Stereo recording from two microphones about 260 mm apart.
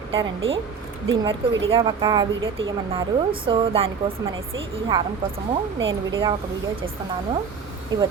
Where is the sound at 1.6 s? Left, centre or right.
Centre.